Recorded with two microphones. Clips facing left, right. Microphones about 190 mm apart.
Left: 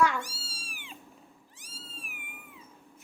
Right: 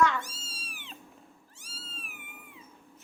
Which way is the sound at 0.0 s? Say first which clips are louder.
Even; 10° left (ahead or behind).